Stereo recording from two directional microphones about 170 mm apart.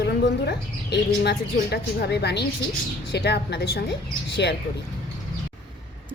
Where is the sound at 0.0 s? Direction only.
75° left (ahead or behind).